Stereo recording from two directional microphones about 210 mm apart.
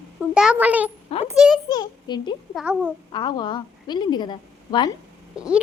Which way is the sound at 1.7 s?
20° left (ahead or behind).